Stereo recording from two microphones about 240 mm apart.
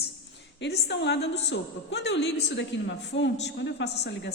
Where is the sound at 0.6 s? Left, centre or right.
Left.